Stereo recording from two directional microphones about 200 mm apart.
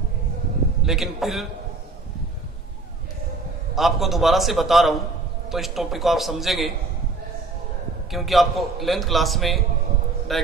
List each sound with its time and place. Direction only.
0.8 s a man's voice: centre (ahead or behind)
3.7 s a man's voice: centre (ahead or behind)
8.1 s a man's voice: centre (ahead or behind)